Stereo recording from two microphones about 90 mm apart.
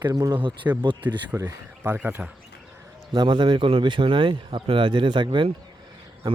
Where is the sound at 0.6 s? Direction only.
20° right (ahead or behind).